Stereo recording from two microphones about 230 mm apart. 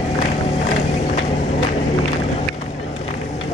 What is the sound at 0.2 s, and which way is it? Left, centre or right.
Run, left.